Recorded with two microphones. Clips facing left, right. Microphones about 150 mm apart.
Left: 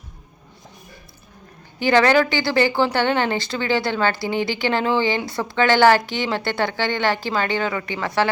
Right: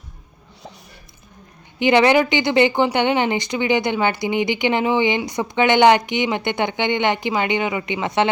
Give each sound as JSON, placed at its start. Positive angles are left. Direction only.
{"t": 1.8, "sound": "a woman's voice", "side_deg": -20}